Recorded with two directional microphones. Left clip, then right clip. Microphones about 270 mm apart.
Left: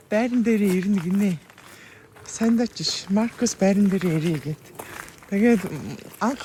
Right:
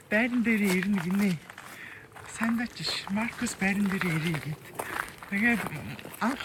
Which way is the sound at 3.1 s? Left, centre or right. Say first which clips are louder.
Left 8 dB; centre.